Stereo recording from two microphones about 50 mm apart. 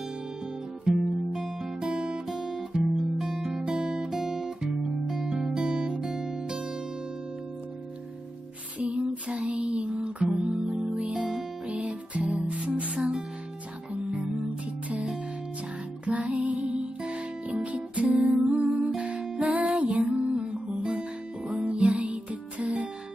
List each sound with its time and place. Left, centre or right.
0.8 s music: centre
4.1 s guitar: centre
8.7 s music: right
11.1 s music: centre
11.6 s music: right
16.1 s music: right